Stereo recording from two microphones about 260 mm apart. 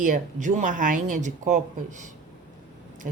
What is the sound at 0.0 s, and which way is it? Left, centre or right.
Speech, right.